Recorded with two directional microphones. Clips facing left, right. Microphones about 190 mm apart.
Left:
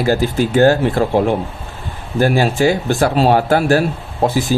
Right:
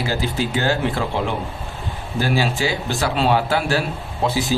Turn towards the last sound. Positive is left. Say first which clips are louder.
# left 5 dB
turn(degrees=50)  # may be behind; listen again after turning